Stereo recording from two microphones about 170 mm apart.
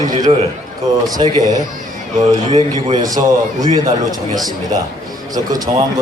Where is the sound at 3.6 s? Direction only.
25° right (ahead or behind).